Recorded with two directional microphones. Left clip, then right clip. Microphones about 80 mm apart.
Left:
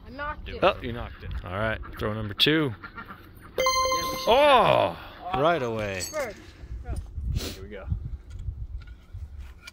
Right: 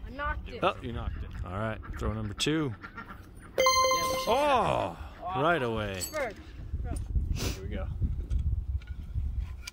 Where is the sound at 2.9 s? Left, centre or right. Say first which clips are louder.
Left 3 dB; left.